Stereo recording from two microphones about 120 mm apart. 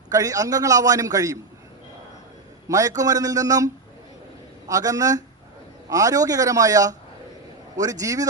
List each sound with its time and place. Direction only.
0.1 s a man's voice: 30° right (ahead or behind)
2.6 s a man's voice: 30° right (ahead or behind)
4.7 s a man's voice: 30° right (ahead or behind)